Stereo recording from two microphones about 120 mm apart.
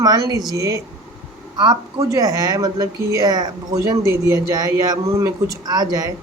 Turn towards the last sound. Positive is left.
turn(degrees=-30)  # may be behind; listen again after turning